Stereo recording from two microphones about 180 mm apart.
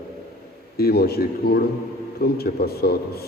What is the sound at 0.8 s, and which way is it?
A man's voice, 60° left (ahead or behind).